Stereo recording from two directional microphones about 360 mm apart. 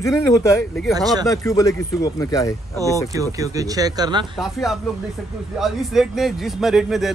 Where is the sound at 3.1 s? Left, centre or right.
Centre.